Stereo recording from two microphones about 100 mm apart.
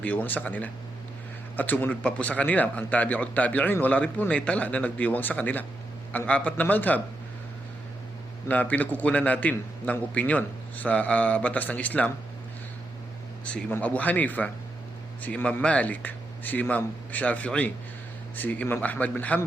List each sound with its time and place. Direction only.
0.0 s speech: 15° left (ahead or behind)
8.4 s speech: 15° left (ahead or behind)
13.4 s speech: 10° left (ahead or behind)